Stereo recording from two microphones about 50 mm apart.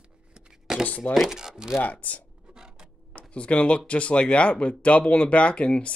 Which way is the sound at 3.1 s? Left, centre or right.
Left.